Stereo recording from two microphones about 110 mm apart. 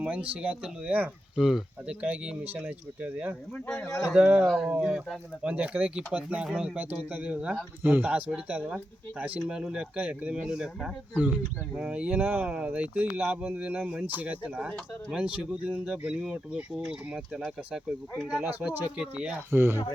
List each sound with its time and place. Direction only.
0.0 s speech: 10° right (ahead or behind)
4.4 s speech: centre (ahead or behind)
18.4 s speech: 15° right (ahead or behind)